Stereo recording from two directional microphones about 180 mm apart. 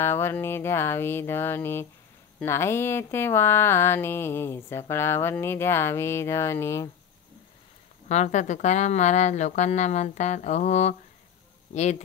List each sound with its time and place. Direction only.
0.0 s speech: 15° left (ahead or behind)
8.1 s speech: 40° left (ahead or behind)